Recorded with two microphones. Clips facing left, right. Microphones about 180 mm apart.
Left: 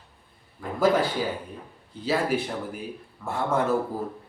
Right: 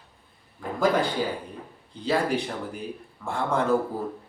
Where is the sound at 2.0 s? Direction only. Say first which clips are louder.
Even; 5° left (ahead or behind).